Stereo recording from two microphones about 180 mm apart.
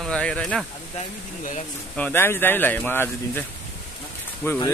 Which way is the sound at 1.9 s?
10° left (ahead or behind).